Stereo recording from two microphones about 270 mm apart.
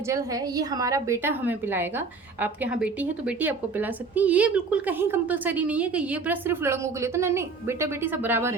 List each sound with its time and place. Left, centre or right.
0.1 s a woman's voice: centre